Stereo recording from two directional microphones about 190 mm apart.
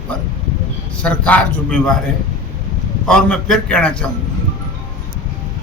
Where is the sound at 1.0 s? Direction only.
5° left (ahead or behind).